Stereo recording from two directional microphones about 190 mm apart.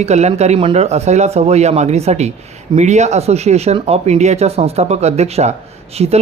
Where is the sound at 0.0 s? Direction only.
35° right (ahead or behind).